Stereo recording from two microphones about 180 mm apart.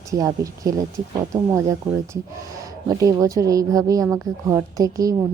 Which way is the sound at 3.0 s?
20° right (ahead or behind).